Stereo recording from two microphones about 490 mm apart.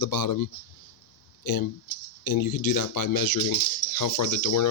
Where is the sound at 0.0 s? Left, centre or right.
Left.